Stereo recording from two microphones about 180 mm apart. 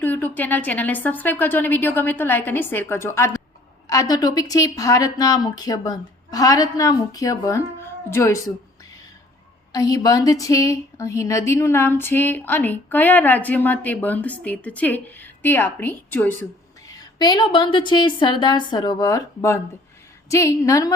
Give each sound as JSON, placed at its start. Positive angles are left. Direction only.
{"t": 0.0, "sound": "a woman's voice", "side_deg": 10}
{"t": 9.7, "sound": "speech", "side_deg": 20}